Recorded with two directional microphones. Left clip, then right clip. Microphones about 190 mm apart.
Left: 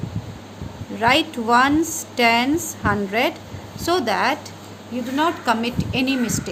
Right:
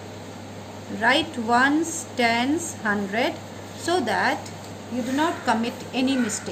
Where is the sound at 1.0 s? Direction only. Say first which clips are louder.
Left 3 dB; 55° left (ahead or behind).